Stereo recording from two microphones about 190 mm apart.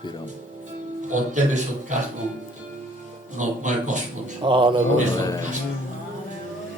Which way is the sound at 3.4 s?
40° right (ahead or behind).